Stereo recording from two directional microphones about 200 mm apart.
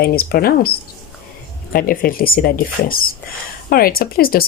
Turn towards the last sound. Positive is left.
turn(degrees=45)  # may be behind; listen again after turning